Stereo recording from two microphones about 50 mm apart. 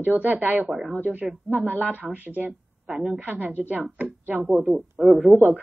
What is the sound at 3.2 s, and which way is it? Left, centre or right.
Speech, right.